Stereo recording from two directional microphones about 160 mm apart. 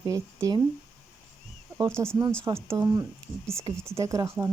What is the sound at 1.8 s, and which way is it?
Speech, 15° right (ahead or behind).